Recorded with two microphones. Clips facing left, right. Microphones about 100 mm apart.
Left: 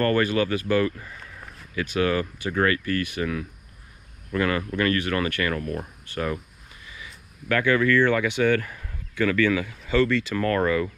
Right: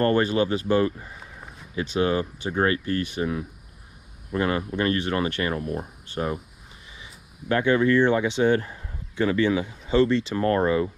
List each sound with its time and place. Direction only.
0.0 s speech: 20° right (ahead or behind)
0.7 s a sound: 25° right (ahead or behind)
2.0 s speech: 20° right (ahead or behind)